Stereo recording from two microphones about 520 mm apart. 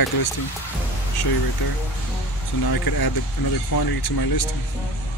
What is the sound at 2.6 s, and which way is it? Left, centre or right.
Speech, left.